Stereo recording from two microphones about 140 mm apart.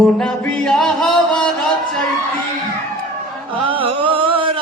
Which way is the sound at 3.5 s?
40° right (ahead or behind).